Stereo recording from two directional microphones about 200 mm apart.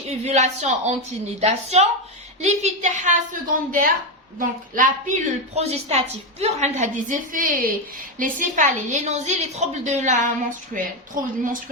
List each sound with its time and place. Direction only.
0.0 s a woman's voice: 35° right (ahead or behind)
5.5 s a woman's voice: 30° right (ahead or behind)